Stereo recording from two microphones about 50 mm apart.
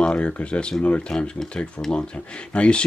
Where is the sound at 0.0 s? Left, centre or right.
Left.